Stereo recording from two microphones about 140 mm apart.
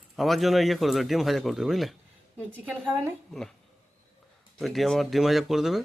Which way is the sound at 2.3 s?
15° right (ahead or behind).